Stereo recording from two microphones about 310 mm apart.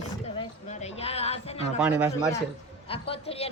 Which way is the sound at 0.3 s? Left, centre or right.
Left.